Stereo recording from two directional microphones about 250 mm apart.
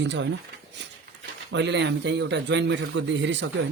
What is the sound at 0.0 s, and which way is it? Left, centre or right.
Speech, right.